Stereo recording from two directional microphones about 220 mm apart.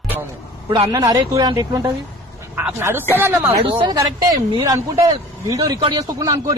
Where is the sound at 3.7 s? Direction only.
20° right (ahead or behind).